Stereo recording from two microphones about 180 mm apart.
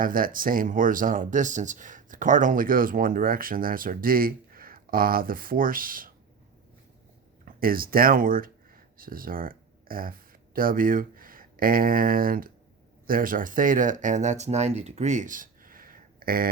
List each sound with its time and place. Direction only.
0.0 s speech: 50° right (ahead or behind)
7.4 s speech: 55° right (ahead or behind)